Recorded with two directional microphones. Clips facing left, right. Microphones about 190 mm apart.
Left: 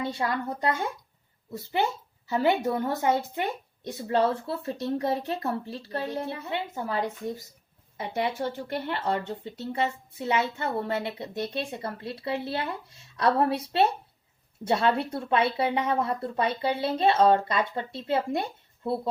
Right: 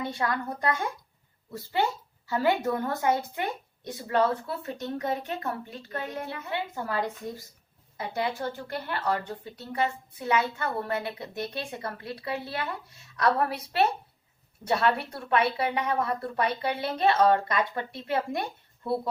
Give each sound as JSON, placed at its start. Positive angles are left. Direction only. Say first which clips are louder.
{"t": 0.1, "sound": "speech", "louder": "left 1 dB", "side_deg": 25}
{"t": 2.2, "sound": "speech", "louder": "left 1 dB", "side_deg": 20}